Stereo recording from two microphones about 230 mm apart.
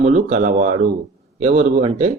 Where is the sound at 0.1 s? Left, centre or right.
Right.